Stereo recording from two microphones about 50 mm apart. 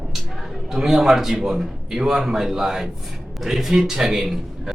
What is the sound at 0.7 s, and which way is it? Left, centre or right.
A man's voice, centre.